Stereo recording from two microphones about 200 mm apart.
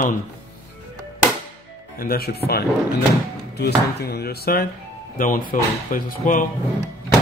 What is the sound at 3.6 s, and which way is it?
Speech, 55° left (ahead or behind).